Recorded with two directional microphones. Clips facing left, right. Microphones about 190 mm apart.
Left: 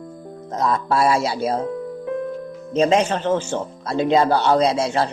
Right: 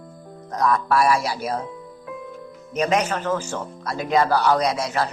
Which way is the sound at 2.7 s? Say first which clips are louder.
Left 4 dB; 25° left (ahead or behind).